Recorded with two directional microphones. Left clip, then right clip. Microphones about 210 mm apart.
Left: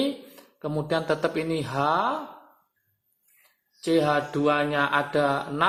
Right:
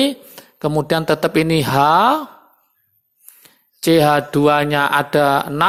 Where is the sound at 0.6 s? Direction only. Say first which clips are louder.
Right 9 dB; 45° right (ahead or behind).